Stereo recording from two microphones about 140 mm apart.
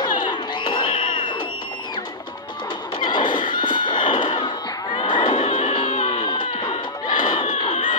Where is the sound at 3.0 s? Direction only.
35° left (ahead or behind).